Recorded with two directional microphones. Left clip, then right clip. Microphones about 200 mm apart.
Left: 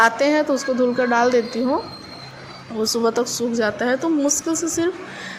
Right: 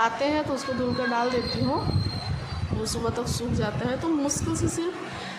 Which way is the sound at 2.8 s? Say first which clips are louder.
Left 10 dB; 30° left (ahead or behind).